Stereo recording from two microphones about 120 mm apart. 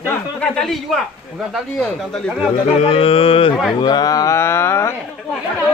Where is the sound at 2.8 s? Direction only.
55° left (ahead or behind).